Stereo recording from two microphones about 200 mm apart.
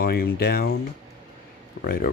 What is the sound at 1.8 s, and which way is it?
Speech, 50° left (ahead or behind).